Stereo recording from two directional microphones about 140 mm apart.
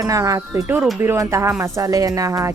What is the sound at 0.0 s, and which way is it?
Speech, 25° right (ahead or behind).